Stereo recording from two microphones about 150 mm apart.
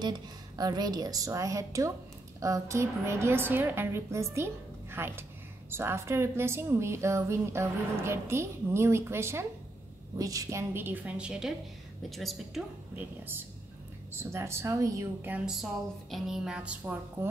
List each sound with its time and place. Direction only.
0.6 s a woman's voice: 25° right (ahead or behind); by 12.6 s centre (ahead or behind)
12.9 s a woman's voice: 10° right (ahead or behind)
15.3 s a woman's voice: 5° right (ahead or behind)